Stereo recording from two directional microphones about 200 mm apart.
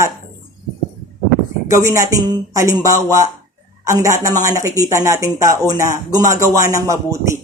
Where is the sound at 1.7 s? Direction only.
15° right (ahead or behind).